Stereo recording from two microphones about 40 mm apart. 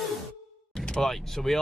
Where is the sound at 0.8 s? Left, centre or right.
Left.